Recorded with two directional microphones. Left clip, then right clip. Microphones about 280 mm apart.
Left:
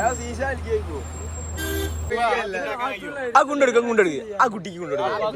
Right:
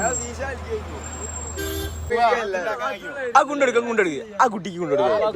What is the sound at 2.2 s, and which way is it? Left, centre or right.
Speech, right.